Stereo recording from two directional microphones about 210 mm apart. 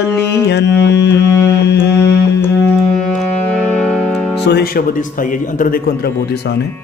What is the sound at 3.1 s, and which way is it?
Music, 5° left (ahead or behind).